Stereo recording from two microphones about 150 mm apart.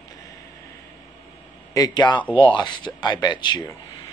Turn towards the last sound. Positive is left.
turn(degrees=30)  # may be behind; listen again after turning